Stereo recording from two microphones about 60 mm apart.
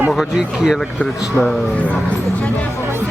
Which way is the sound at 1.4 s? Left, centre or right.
Left.